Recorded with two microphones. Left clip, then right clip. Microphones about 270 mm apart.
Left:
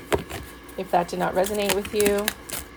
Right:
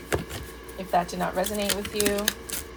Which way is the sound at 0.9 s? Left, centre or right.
Left.